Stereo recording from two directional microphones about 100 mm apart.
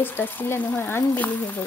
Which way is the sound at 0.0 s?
20° left (ahead or behind).